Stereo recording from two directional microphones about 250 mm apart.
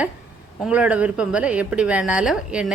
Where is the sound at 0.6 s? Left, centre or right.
Centre.